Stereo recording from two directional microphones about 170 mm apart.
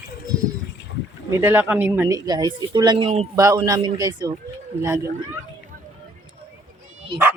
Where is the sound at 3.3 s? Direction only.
20° right (ahead or behind).